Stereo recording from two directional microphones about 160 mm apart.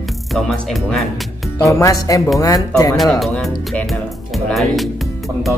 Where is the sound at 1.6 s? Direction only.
20° left (ahead or behind).